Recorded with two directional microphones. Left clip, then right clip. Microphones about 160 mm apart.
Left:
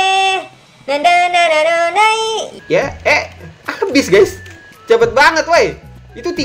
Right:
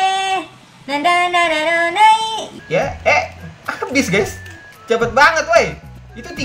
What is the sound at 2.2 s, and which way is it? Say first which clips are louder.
Laughter: left 4 dB; 45° left (ahead or behind).